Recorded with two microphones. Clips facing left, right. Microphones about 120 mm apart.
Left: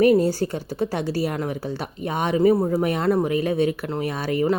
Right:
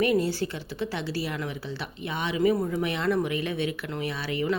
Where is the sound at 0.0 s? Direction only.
40° left (ahead or behind).